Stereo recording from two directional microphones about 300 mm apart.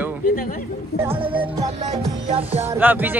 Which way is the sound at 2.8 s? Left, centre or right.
Centre.